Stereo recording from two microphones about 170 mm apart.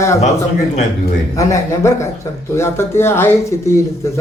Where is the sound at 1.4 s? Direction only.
15° left (ahead or behind).